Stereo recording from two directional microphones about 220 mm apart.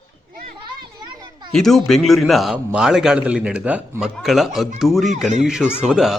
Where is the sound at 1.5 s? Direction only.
Centre (ahead or behind).